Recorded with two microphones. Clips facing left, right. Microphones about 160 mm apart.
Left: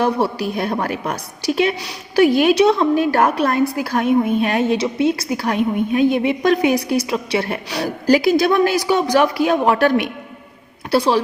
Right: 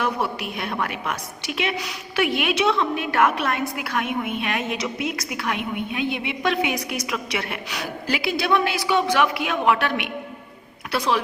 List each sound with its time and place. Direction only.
0.0 s a woman's voice: 35° left (ahead or behind)